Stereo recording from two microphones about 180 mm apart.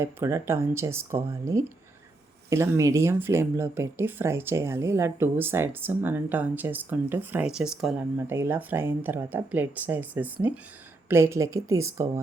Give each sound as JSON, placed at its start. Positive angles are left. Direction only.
{"t": 0.0, "sound": "speech", "side_deg": -15}